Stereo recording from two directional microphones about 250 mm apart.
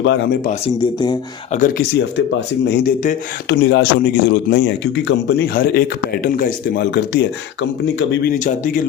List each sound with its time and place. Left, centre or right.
0.0 s speech: left
2.6 s a man's voice: left
8.4 s a man's voice: left